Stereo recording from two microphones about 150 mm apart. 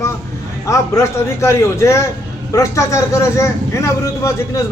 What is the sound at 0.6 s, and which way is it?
A man's voice, 20° left (ahead or behind).